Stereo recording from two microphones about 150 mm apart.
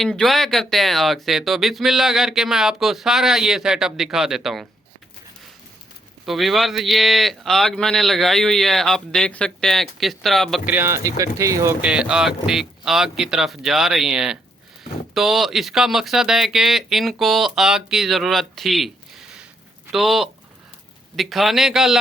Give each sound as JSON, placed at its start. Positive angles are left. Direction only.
{"t": 0.0, "sound": "speech", "side_deg": 0}
{"t": 6.2, "sound": "speech", "side_deg": 0}
{"t": 10.7, "sound": "speech", "side_deg": -15}
{"t": 11.8, "sound": "speech", "side_deg": -5}
{"t": 19.9, "sound": "speech", "side_deg": 0}